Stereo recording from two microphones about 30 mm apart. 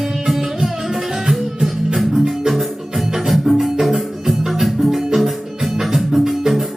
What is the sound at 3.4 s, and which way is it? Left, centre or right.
Music, centre.